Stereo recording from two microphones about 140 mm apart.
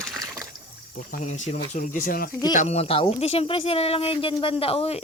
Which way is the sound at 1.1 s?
60° left (ahead or behind).